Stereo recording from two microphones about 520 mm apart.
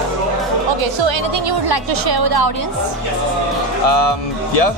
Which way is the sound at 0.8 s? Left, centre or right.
Right.